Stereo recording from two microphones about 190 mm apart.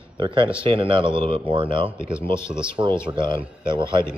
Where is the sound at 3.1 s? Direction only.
25° right (ahead or behind).